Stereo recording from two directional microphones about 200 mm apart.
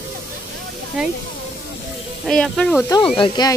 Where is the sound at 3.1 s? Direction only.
25° left (ahead or behind).